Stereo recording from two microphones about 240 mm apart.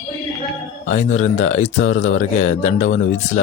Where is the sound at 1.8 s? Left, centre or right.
Left.